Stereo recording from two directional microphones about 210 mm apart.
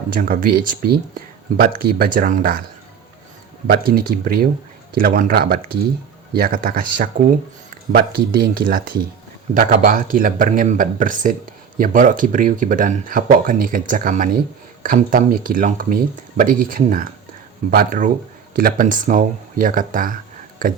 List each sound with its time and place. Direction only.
0.1 s speech: 40° right (ahead or behind)
3.7 s speech: 45° right (ahead or behind)